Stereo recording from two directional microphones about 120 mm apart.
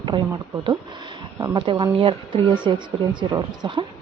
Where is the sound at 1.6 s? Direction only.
40° right (ahead or behind).